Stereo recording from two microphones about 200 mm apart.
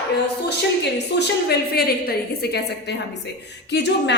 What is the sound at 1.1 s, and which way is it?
A woman's voice, 55° left (ahead or behind).